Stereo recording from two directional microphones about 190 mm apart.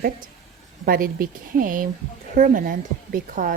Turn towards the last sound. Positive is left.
turn(degrees=-45)  # may be behind; listen again after turning